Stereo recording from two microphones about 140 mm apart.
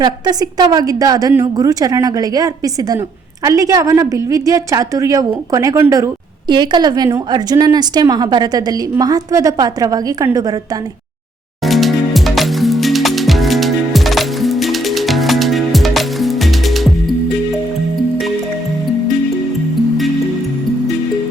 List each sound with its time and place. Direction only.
0.0 s a woman's voice: 30° right (ahead or behind)
6.5 s a woman's voice: 30° right (ahead or behind)
11.6 s music: centre (ahead or behind)